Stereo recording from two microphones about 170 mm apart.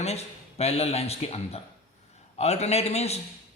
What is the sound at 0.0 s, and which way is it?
Speech, 40° left (ahead or behind).